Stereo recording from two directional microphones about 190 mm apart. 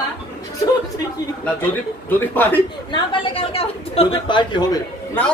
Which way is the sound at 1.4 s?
10° left (ahead or behind).